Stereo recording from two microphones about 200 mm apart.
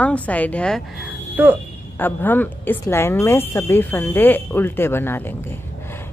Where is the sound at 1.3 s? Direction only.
10° right (ahead or behind).